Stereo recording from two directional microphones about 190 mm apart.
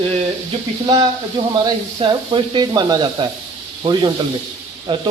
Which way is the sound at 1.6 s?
25° right (ahead or behind).